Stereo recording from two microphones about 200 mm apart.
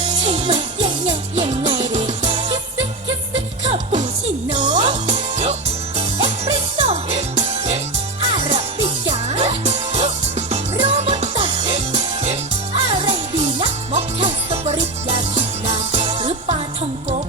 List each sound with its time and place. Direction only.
0.0 s music: 25° right (ahead or behind)